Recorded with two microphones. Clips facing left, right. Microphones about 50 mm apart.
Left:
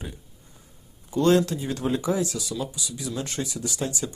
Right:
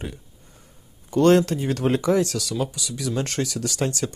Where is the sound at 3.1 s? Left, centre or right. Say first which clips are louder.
Right 5 dB; right.